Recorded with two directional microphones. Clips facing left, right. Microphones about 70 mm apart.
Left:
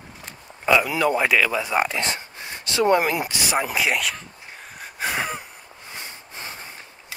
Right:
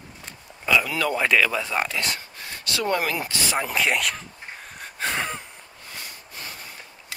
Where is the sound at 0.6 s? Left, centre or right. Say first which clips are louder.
Left 3 dB; left.